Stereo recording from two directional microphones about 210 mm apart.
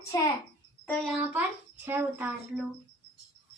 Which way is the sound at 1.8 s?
10° right (ahead or behind).